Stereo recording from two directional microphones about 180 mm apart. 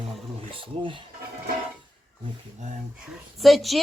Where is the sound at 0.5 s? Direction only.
30° right (ahead or behind).